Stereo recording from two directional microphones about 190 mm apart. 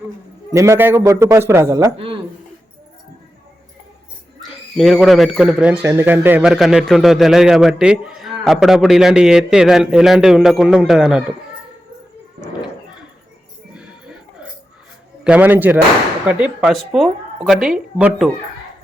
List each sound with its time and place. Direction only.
0.5 s a man's voice: 15° right (ahead or behind)
2.0 s speech: 25° right (ahead or behind)
4.8 s a man's voice: centre (ahead or behind)
13.7 s music: 5° right (ahead or behind)
15.2 s a man's voice: 5° right (ahead or behind)